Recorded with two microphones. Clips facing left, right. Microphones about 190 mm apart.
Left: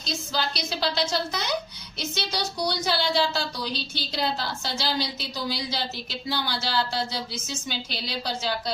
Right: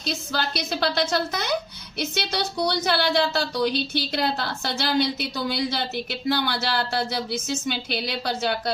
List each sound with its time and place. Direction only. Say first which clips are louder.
0.1 s speech: right 2 dB; 60° right (ahead or behind)